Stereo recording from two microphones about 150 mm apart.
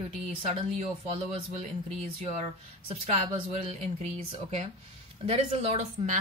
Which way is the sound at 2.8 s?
40° right (ahead or behind).